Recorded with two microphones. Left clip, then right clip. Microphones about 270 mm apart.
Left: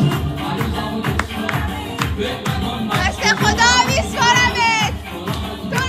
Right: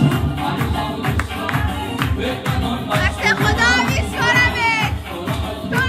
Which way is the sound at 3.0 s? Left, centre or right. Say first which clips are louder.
Left 1 dB; centre.